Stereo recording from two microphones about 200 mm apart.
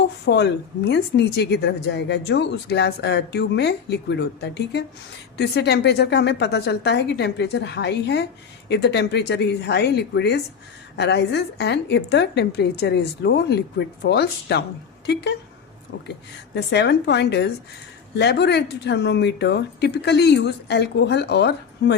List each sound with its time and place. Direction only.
0.3 s a woman's voice: 55° left (ahead or behind)
16.6 s a woman's voice: 55° left (ahead or behind)